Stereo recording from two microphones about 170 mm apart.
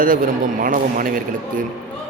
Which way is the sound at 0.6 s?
55° right (ahead or behind).